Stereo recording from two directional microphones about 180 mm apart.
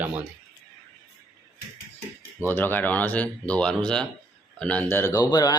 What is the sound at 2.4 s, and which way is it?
Speech, 10° left (ahead or behind).